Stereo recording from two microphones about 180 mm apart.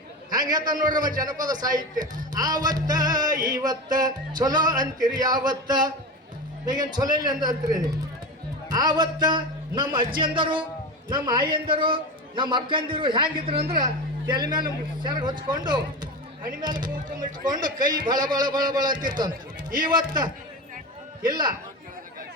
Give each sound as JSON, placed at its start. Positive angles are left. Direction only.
{"t": 0.3, "sound": "music", "side_deg": -20}